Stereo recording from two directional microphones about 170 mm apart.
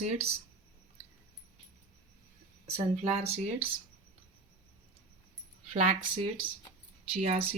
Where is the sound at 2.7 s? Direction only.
35° right (ahead or behind).